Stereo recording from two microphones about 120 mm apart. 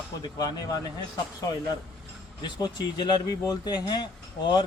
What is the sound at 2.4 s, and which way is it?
Speech, 35° left (ahead or behind).